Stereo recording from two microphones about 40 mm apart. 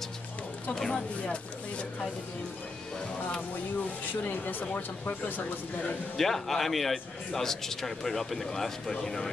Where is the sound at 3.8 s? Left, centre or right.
Left.